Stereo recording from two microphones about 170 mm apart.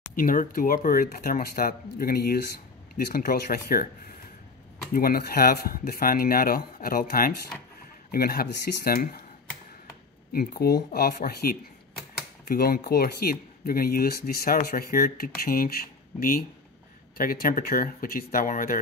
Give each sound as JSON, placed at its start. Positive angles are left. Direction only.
{"t": 0.1, "sound": "speech", "side_deg": 55}
{"t": 10.3, "sound": "speech", "side_deg": 60}